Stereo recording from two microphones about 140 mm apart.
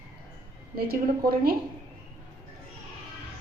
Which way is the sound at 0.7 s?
90° right.